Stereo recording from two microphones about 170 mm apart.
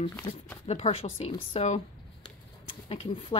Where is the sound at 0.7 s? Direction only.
35° left (ahead or behind).